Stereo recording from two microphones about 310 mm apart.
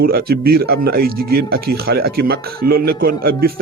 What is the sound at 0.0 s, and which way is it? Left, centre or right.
Speech, right.